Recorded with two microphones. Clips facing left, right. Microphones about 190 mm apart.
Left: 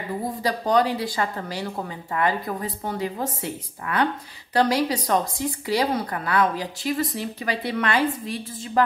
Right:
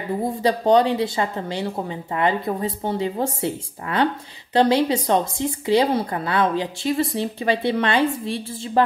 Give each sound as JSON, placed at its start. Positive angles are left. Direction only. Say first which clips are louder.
{"t": 0.4, "sound": "speech", "louder": "right 5 dB", "side_deg": -25}